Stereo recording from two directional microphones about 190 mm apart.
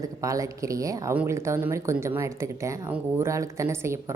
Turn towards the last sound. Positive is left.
turn(degrees=-15)  # may be behind; listen again after turning